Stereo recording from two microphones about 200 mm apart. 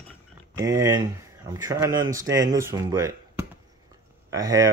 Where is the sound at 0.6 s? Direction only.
15° right (ahead or behind).